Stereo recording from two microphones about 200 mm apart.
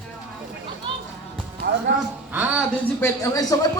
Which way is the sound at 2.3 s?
5° right (ahead or behind).